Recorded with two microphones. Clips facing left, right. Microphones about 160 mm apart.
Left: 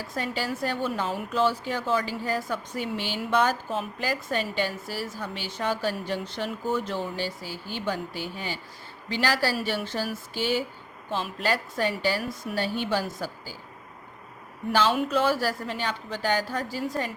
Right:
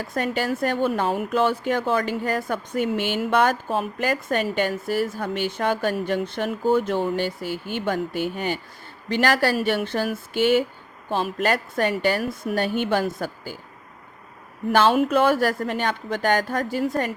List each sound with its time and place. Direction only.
0.0 s a woman's voice: 55° right (ahead or behind)
14.7 s a woman's voice: 55° right (ahead or behind)